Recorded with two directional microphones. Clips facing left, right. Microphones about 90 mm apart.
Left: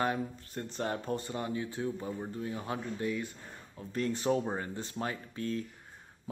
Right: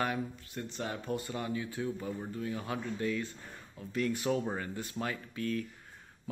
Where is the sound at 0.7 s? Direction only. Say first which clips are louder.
Left 3 dB; 40° left (ahead or behind); by 3.2 s 20° left (ahead or behind).